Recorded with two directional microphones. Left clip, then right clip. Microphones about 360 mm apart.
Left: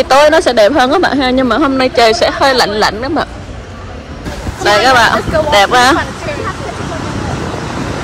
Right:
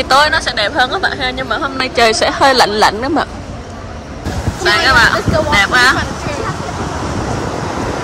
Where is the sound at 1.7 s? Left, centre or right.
Centre.